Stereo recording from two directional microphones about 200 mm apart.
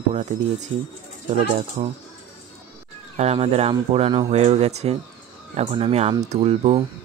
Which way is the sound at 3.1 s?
30° right (ahead or behind).